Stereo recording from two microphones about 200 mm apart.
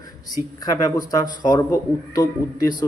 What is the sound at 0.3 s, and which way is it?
Speech, 20° left (ahead or behind).